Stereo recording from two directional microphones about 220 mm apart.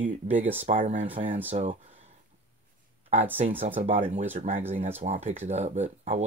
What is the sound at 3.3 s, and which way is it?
Speech, 30° right (ahead or behind).